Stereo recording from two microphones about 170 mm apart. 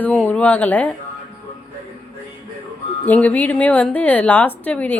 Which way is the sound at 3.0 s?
10° left (ahead or behind).